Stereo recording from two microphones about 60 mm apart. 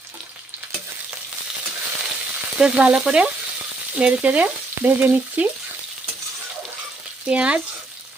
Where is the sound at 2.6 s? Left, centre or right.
Centre.